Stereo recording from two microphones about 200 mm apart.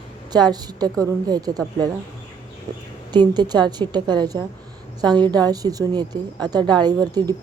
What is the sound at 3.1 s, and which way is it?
Speech, 20° right (ahead or behind).